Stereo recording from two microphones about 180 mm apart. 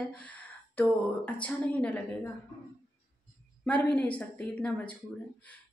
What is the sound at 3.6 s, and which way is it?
A woman's voice, 10° left (ahead or behind).